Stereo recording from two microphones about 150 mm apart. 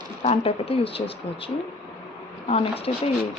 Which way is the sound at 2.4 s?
40° left (ahead or behind).